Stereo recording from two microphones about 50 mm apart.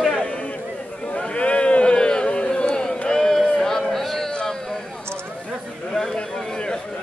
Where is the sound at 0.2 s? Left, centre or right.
Left; by 4.3 s centre.